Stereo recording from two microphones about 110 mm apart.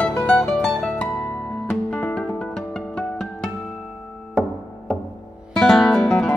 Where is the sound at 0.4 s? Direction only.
5° left (ahead or behind).